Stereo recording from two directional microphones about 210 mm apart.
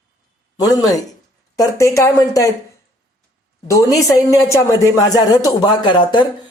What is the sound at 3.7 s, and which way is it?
A woman's voice, 15° left (ahead or behind).